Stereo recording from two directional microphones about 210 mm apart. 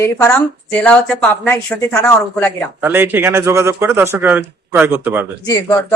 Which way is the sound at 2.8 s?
10° right (ahead or behind).